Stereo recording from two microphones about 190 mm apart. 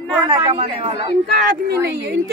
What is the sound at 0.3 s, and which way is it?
Speech, 30° right (ahead or behind).